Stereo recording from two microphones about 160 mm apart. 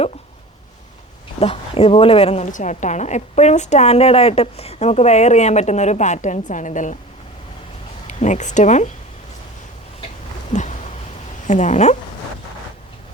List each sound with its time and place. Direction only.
1.4 s a woman's voice: 35° left (ahead or behind)
8.0 s speech: 45° left (ahead or behind)
10.5 s a sound: 50° left (ahead or behind)
11.4 s a woman's voice: 45° left (ahead or behind)